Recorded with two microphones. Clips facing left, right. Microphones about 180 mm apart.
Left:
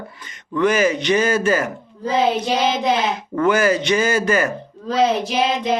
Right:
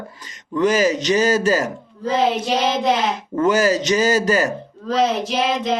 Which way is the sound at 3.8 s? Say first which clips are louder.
Right 1 dB; 40° right (ahead or behind).